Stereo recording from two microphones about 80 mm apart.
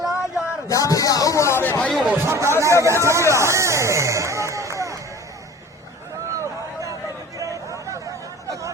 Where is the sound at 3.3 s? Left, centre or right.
Right.